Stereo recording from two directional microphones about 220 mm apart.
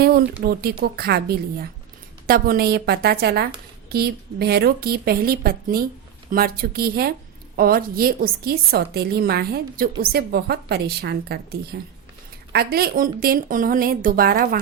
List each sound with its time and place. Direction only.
0.4 s a woman's voice: 45° right (ahead or behind)